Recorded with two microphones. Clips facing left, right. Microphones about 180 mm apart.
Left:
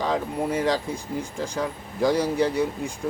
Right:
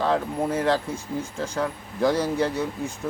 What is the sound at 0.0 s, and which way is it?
Speech, 15° left (ahead or behind).